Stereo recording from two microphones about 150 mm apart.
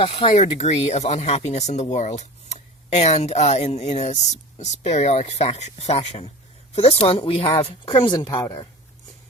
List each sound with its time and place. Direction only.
0.0 s a woman's voice: 40° left (ahead or behind); by 8.5 s 25° left (ahead or behind)